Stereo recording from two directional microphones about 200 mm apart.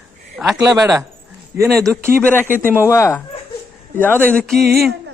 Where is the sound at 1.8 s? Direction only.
15° right (ahead or behind).